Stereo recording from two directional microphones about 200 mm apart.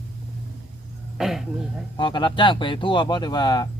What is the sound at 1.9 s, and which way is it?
Speech, 25° left (ahead or behind).